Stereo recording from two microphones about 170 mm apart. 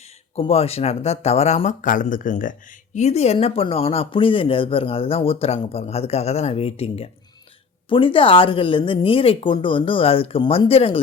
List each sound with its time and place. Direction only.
0.3 s speech: 35° left (ahead or behind)